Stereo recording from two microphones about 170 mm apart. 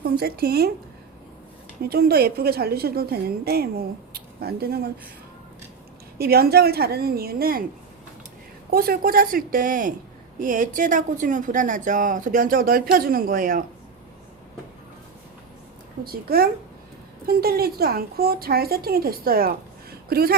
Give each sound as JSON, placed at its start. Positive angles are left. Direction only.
{"t": 0.0, "sound": "speech", "side_deg": -65}
{"t": 1.8, "sound": "a woman's voice", "side_deg": -65}
{"t": 6.1, "sound": "a woman's voice", "side_deg": -65}
{"t": 8.7, "sound": "a woman's voice", "side_deg": -60}
{"t": 16.0, "sound": "a woman's voice", "side_deg": -60}